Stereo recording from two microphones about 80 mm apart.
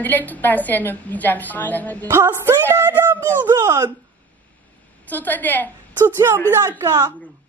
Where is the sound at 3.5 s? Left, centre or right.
Right.